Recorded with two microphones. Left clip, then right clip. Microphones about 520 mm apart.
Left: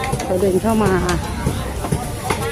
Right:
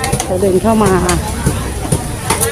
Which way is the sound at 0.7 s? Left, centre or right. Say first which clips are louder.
Right 6 dB; left.